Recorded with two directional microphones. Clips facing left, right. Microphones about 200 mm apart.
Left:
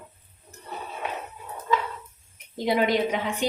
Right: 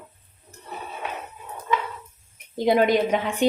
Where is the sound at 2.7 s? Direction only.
50° right (ahead or behind).